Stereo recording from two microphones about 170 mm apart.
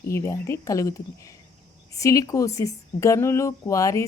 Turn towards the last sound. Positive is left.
turn(degrees=20)  # may be behind; listen again after turning